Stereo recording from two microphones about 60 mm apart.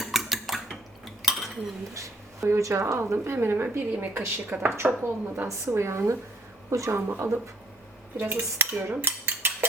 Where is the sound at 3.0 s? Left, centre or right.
Right.